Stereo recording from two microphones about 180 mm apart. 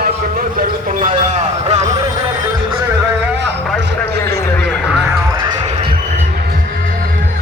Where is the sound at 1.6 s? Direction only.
40° right (ahead or behind).